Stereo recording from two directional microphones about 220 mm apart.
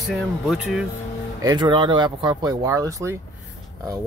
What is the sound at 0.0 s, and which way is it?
Speech, centre (ahead or behind).